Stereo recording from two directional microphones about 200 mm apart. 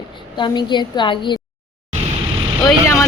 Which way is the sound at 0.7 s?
25° left (ahead or behind).